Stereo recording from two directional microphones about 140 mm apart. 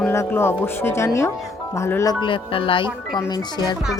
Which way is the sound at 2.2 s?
40° left (ahead or behind).